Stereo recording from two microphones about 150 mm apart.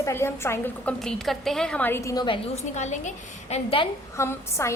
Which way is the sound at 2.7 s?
50° left (ahead or behind).